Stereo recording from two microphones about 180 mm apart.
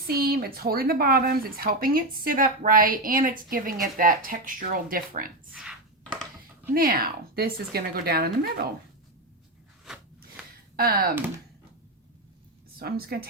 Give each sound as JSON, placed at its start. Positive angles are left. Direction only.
{"t": 0.1, "sound": "speech", "side_deg": -55}
{"t": 5.5, "sound": "a sound", "side_deg": -5}
{"t": 6.7, "sound": "a woman's voice", "side_deg": -55}
{"t": 9.8, "sound": "a sound", "side_deg": -5}
{"t": 10.8, "sound": "a woman's voice", "side_deg": -55}
{"t": 12.8, "sound": "a woman's voice", "side_deg": -60}